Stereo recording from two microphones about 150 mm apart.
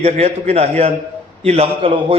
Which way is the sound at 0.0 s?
45° right (ahead or behind).